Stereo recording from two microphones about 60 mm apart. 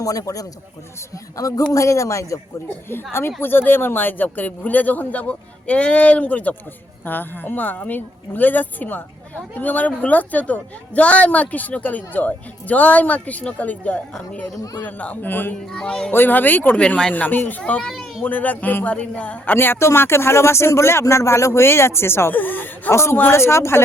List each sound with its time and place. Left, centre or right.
0.0 s speech: left
1.7 s speech: left
2.6 s speech: left
15.7 s speech: centre
16.1 s speech: left
16.8 s speech: centre
17.6 s speech: centre
19.5 s speech: left
22.4 s speech: left
22.9 s speech: left